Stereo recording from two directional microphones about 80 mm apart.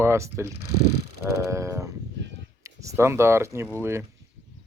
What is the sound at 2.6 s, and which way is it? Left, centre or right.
Speech, right.